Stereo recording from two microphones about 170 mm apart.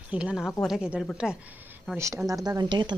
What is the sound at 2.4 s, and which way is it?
Speech, 25° right (ahead or behind).